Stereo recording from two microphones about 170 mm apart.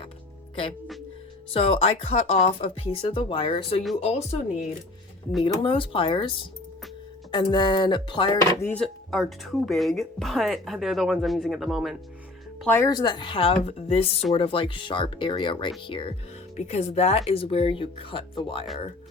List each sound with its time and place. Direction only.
1.5 s speech: 35° left (ahead or behind)
8.6 s speech: 5° left (ahead or behind)
12.6 s speech: 15° left (ahead or behind)